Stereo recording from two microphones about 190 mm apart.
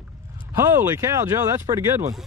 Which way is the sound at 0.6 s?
15° right (ahead or behind).